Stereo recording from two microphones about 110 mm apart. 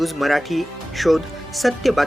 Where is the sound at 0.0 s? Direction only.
Centre (ahead or behind).